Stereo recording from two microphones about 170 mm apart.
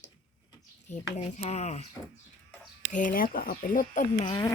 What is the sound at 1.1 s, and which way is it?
Speech, 40° left (ahead or behind).